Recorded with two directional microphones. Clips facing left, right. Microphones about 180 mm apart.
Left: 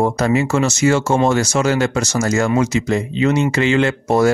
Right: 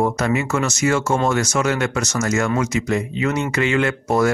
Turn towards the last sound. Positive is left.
turn(degrees=30)  # may be behind; listen again after turning